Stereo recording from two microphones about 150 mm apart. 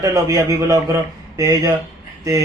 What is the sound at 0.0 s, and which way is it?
A man's voice, 20° right (ahead or behind).